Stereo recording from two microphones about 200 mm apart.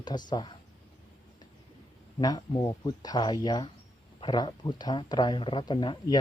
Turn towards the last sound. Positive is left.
turn(degrees=20)  # may be behind; listen again after turning